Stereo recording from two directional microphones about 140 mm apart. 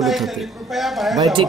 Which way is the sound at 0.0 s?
Centre (ahead or behind).